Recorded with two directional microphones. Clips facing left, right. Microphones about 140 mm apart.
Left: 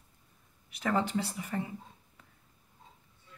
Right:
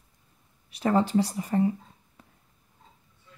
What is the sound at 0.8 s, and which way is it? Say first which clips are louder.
Speech: right 7 dB; 35° right (ahead or behind).